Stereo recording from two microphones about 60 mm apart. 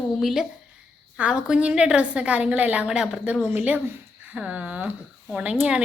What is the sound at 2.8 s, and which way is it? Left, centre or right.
Speech, centre.